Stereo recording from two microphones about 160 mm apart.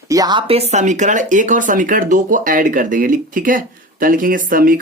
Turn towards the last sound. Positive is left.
turn(degrees=-60)  # may be behind; listen again after turning